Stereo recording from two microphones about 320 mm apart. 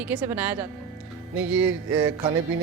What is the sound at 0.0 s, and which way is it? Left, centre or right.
A woman's voice, centre.